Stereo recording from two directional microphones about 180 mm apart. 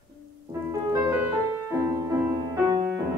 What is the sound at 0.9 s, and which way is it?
Music, 10° right (ahead or behind).